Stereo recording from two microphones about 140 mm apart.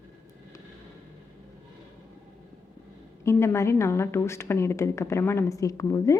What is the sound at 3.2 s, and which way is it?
Speech, 20° left (ahead or behind).